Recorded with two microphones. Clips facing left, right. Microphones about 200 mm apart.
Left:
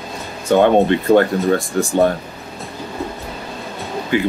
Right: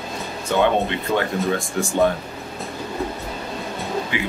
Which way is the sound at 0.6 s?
50° left (ahead or behind).